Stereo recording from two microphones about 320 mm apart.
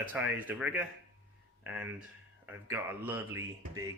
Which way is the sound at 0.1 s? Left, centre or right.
Centre.